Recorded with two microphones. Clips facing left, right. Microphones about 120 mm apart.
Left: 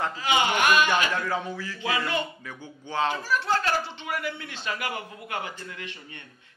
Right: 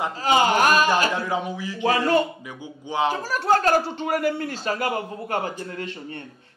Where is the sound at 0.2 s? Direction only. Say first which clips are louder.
Right 6 dB; 40° right (ahead or behind).